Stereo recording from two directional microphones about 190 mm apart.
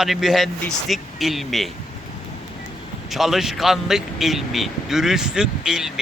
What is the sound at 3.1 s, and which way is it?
Speech, centre (ahead or behind).